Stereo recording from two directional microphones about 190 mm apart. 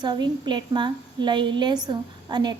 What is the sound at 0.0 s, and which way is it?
A woman's voice, 25° right (ahead or behind).